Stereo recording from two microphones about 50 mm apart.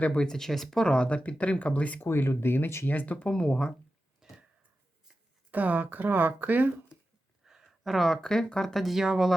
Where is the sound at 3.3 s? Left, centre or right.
Centre.